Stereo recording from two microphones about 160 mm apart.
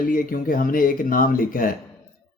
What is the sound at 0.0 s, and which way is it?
Speech, 60° left (ahead or behind).